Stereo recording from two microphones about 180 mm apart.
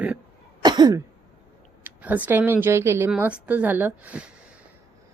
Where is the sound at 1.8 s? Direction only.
10° right (ahead or behind).